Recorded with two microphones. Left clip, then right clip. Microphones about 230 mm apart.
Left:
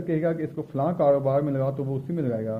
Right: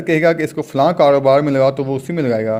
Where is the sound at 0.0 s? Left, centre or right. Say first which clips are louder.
Right 12 dB; right.